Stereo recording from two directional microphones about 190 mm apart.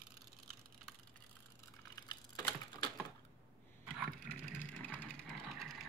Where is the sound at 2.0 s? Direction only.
20° left (ahead or behind).